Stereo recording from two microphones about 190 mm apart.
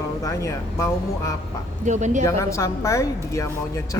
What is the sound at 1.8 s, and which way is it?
Speech, 40° right (ahead or behind).